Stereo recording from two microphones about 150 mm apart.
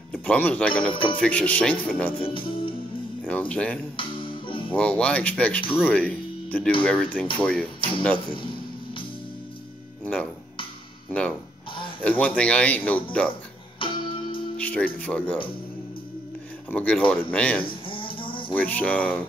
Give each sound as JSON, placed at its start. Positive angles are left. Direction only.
{"t": 0.1, "sound": "speech", "side_deg": 10}
{"t": 3.3, "sound": "speech", "side_deg": 10}
{"t": 3.9, "sound": "music", "side_deg": 35}
{"t": 4.7, "sound": "speech", "side_deg": 10}
{"t": 10.0, "sound": "speech", "side_deg": 5}
{"t": 13.8, "sound": "music", "side_deg": 35}
{"t": 14.6, "sound": "music", "side_deg": 10}
{"t": 15.0, "sound": "speech", "side_deg": 5}
{"t": 16.7, "sound": "speech", "side_deg": 5}
{"t": 17.6, "sound": "a sound", "side_deg": 35}
{"t": 18.5, "sound": "speech", "side_deg": 10}